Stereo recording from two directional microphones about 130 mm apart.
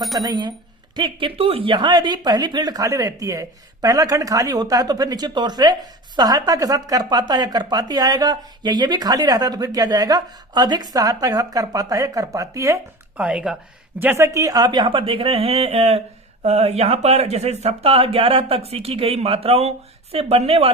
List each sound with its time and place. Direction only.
0.2 s speech: 30° right (ahead or behind)
13.1 s speech: 10° right (ahead or behind)
14.0 s a woman's voice: 20° right (ahead or behind); by 20.7 s 45° right (ahead or behind)